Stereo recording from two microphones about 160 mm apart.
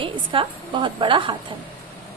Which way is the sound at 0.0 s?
30° right (ahead or behind).